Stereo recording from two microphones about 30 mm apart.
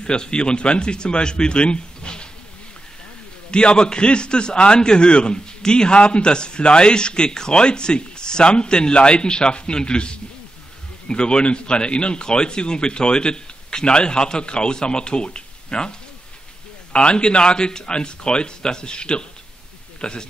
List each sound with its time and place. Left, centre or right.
0.0 s a man's voice: left
3.5 s a man's voice: left